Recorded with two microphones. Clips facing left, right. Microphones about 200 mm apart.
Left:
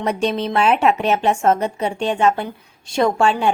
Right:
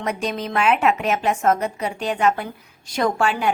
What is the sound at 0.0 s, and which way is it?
Speech, 30° left (ahead or behind).